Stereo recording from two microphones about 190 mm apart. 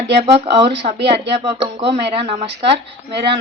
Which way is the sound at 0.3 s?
30° right (ahead or behind).